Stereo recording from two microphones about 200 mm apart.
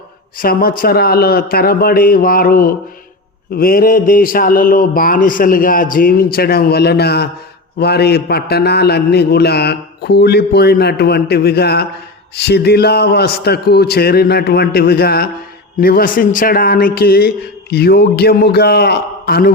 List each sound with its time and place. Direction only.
0.3 s a man's voice: 45° left (ahead or behind)